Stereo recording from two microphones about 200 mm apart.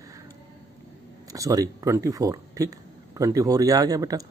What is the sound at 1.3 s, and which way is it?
Speech, 15° right (ahead or behind).